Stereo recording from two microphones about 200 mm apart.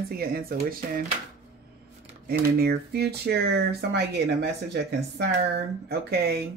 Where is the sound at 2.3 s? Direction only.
50° right (ahead or behind).